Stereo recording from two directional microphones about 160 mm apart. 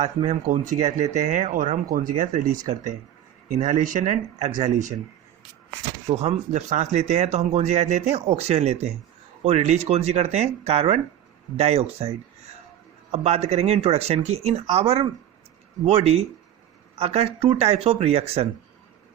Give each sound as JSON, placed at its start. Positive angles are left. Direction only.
{"t": 0.2, "sound": "speech", "side_deg": -45}
{"t": 6.1, "sound": "speech", "side_deg": -45}